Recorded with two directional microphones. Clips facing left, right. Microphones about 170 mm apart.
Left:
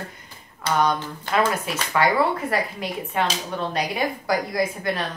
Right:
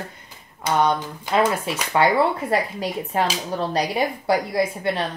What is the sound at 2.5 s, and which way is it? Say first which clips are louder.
A woman's voice: right 3 dB; 35° right (ahead or behind).